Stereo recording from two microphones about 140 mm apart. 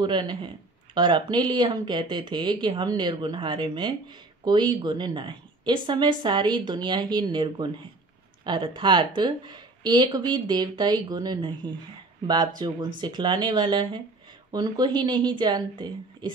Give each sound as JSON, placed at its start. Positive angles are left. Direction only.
{"t": 0.0, "sound": "speech", "side_deg": -30}